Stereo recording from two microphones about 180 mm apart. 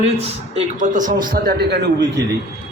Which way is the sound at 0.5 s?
45° right (ahead or behind).